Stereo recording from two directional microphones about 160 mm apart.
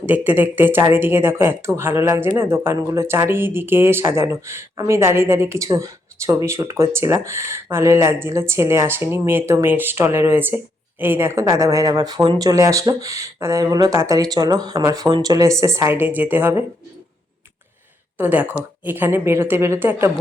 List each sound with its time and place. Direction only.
0.0 s speech: 10° right (ahead or behind)
18.2 s speech: 10° right (ahead or behind)